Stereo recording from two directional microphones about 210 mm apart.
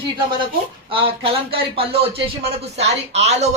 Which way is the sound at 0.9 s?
25° right (ahead or behind).